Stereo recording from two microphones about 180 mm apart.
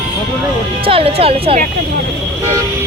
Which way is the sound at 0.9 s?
30° right (ahead or behind).